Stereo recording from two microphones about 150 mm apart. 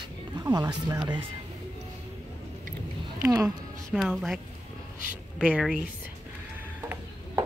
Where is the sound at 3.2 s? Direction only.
15° right (ahead or behind).